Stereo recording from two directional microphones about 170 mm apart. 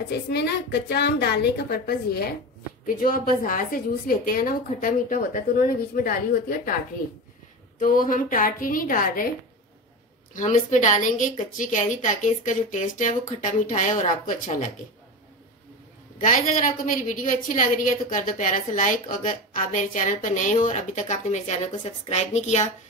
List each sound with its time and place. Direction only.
0.3 s a woman's voice: 75° left (ahead or behind)
2.9 s a woman's voice: 55° left (ahead or behind)
7.8 s a woman's voice: 55° left (ahead or behind)
10.3 s a woman's voice: 45° left (ahead or behind)
16.2 s a woman's voice: 50° left (ahead or behind)